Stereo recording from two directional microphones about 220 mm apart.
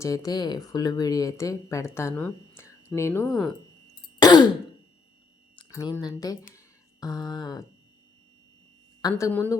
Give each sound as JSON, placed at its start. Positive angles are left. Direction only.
{"t": 0.0, "sound": "speech", "side_deg": 15}
{"t": 4.2, "sound": "throat clearing", "side_deg": 20}
{"t": 5.5, "sound": "speech", "side_deg": 15}
{"t": 9.0, "sound": "a woman's voice", "side_deg": 15}